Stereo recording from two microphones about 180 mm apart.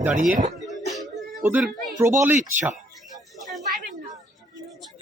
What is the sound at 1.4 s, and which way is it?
Speech, 10° right (ahead or behind).